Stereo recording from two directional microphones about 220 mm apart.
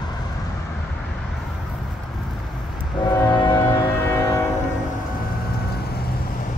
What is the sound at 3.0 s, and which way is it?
Music, 20° left (ahead or behind).